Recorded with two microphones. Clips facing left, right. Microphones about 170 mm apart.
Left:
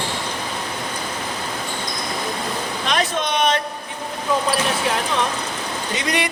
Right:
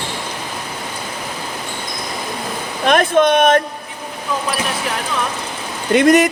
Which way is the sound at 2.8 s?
55° right (ahead or behind).